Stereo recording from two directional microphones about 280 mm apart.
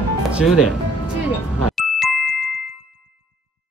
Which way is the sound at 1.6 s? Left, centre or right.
Centre.